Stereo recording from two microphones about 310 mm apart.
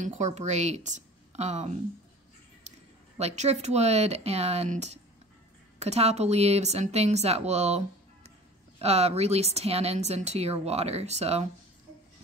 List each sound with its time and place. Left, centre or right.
0.0 s a woman's voice: right
3.2 s speech: right